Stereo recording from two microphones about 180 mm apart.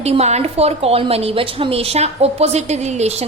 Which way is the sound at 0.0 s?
35° right (ahead or behind).